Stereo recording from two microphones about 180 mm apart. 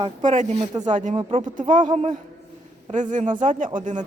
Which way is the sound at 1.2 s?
30° right (ahead or behind).